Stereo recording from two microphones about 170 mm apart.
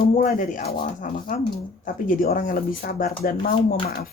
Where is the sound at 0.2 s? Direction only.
50° left (ahead or behind).